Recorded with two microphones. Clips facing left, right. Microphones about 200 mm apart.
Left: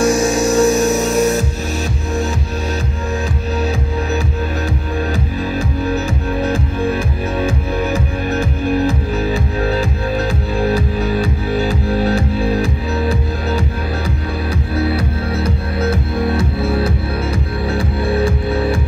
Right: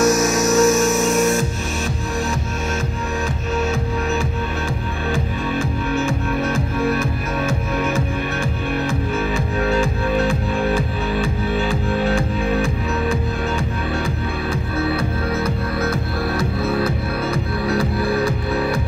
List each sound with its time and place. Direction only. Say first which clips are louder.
0.0 s music: left 2 dB; 30° left (ahead or behind)
6.5 s music: left 2 dB; 30° left (ahead or behind)
9.6 s music: left 1 dB; 35° left (ahead or behind)
17.6 s music: left 1 dB; 30° left (ahead or behind)